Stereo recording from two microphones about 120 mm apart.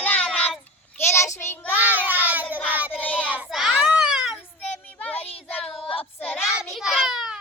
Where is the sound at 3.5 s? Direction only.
5° right (ahead or behind).